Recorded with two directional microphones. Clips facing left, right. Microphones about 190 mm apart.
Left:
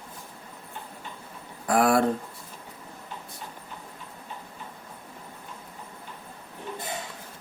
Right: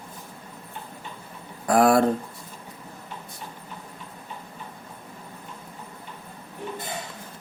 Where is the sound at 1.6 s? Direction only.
40° right (ahead or behind).